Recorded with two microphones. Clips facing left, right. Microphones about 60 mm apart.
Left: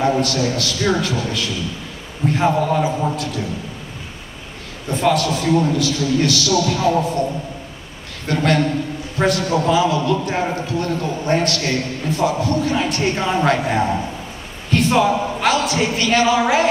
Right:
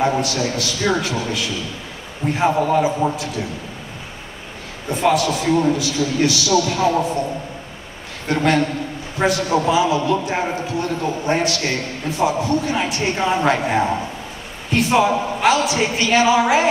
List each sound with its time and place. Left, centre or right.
0.0 s a man's voice: centre
4.8 s a man's voice: centre
8.3 s a man's voice: centre